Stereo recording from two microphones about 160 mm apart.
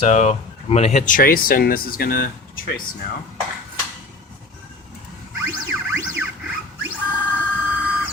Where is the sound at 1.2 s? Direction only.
65° left (ahead or behind).